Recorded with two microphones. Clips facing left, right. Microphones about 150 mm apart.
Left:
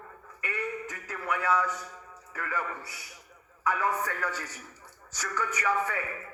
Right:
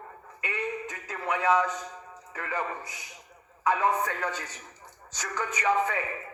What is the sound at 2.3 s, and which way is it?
A man's voice, 20° right (ahead or behind).